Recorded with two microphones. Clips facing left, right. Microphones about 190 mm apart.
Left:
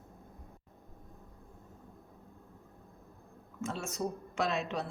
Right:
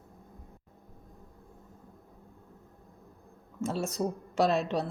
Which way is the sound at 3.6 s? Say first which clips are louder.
Right 5 dB; 35° right (ahead or behind).